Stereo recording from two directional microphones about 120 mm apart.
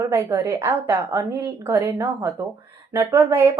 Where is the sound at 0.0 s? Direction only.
25° right (ahead or behind).